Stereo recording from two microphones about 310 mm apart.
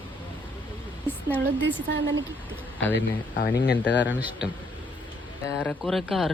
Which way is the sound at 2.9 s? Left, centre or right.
Left.